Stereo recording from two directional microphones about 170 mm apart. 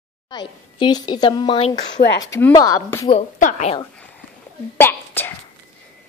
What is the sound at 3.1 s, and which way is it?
Speech, 45° left (ahead or behind).